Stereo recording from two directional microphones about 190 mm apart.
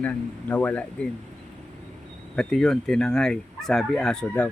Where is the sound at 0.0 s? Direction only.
10° left (ahead or behind).